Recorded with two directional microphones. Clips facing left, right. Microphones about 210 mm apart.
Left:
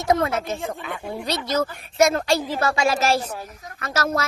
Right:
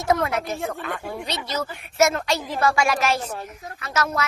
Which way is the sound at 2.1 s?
35° left (ahead or behind).